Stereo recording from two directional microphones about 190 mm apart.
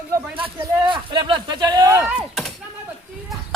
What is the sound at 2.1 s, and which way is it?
Speech, centre (ahead or behind).